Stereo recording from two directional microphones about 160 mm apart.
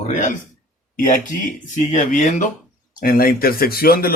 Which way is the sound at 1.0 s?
55° left (ahead or behind).